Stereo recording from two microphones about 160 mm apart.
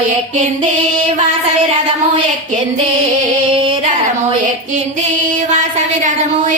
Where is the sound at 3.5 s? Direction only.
35° right (ahead or behind).